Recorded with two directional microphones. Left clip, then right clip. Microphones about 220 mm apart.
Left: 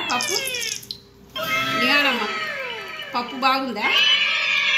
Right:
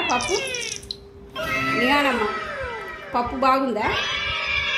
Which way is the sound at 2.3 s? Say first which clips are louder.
Left 1 dB; 20° right (ahead or behind).